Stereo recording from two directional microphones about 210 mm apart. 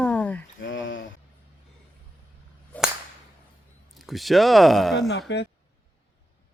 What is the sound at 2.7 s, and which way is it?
Whip, 5° left (ahead or behind).